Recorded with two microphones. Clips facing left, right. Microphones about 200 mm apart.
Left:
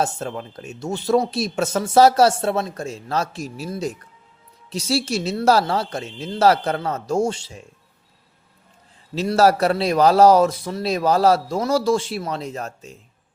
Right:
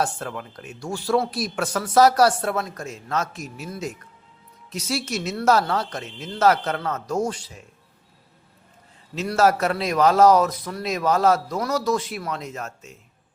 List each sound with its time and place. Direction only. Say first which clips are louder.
0.0 s speech: left 2 dB; 25° left (ahead or behind)
9.1 s a man's voice: left 3 dB; 35° left (ahead or behind)